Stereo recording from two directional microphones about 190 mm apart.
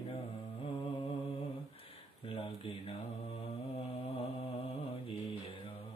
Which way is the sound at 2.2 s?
30° left (ahead or behind).